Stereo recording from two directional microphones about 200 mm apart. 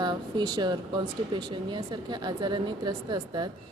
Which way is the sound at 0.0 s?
20° right (ahead or behind).